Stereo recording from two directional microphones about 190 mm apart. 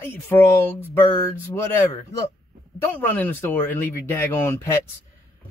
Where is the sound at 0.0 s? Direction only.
10° left (ahead or behind).